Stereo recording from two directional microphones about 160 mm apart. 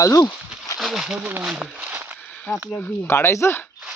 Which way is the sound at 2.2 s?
5° left (ahead or behind).